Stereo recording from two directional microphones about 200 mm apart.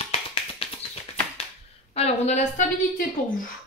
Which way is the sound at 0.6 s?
30° left (ahead or behind).